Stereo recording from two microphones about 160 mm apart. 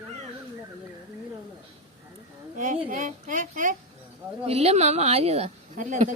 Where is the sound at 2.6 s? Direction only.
50° right (ahead or behind).